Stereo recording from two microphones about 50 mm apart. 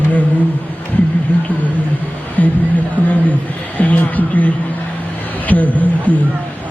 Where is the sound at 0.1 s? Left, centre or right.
Left.